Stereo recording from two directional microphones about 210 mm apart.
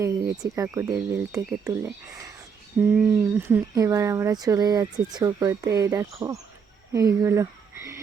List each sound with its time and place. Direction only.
0.0 s speech: 15° right (ahead or behind)
2.9 s speech: 10° right (ahead or behind)